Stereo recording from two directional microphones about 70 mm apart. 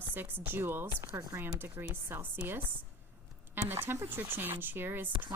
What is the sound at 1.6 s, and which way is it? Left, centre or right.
Speech, right.